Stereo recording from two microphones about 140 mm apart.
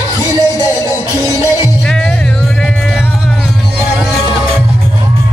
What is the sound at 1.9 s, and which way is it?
Music, 5° left (ahead or behind).